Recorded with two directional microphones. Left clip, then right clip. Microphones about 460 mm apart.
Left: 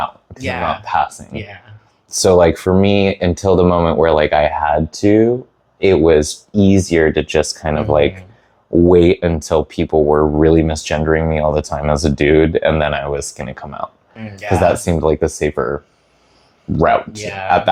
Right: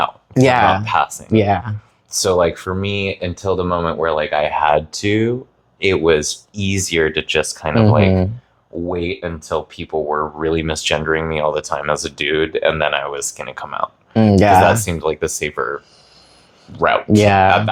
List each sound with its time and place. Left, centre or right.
0.3 s speech: right
0.9 s speech: left
1.3 s speech: right
2.0 s speech: left
8.9 s speech: left
14.1 s speech: right
14.6 s speech: left
17.2 s speech: right